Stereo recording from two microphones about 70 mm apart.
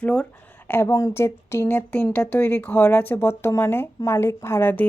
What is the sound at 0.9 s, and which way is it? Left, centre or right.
Speech, left.